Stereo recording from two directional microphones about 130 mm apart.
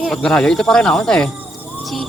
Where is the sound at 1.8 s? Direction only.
Centre (ahead or behind).